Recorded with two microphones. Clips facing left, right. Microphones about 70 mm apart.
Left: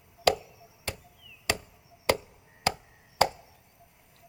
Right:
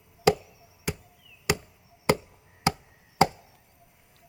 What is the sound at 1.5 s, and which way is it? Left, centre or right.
Chop, centre.